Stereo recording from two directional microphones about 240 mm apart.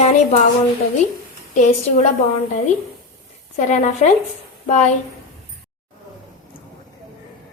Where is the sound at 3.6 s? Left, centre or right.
Left.